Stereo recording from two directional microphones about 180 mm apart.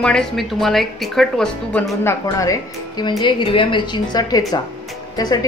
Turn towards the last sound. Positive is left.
turn(degrees=20)  # may be behind; listen again after turning